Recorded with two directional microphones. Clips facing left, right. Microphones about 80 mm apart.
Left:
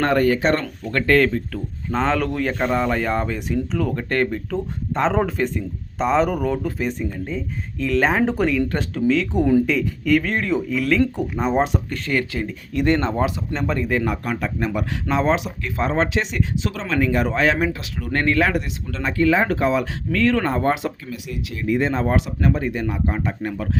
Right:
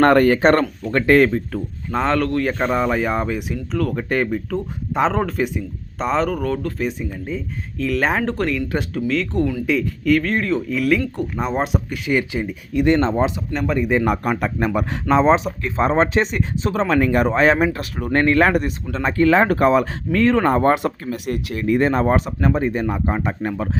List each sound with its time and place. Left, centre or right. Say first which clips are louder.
0.0 s speech: right 5 dB; right
0.3 s speech: right 5 dB; right
0.6 s speech: right 4 dB; centre
1.9 s speech: right 2 dB; centre
13.0 s speech: right 3 dB; right
13.5 s speech: right 3 dB; centre
14.0 s speech: right 4 dB; right
15.1 s speech: right 6 dB; centre
15.4 s speech: right 4 dB; right
18.4 s speech: right 4 dB; right
19.3 s speech: right 5 dB; right
20.1 s speech: right 3 dB; right
20.7 s speech: right 4 dB; right
22.0 s speech: right 2 dB; right